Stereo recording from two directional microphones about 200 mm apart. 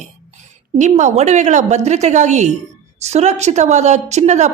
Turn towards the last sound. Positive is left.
turn(degrees=-35)  # may be behind; listen again after turning